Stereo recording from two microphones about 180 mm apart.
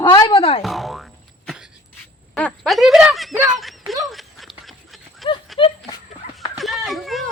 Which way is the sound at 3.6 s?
Centre (ahead or behind).